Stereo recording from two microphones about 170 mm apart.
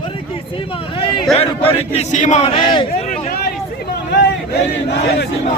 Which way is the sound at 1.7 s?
40° left (ahead or behind).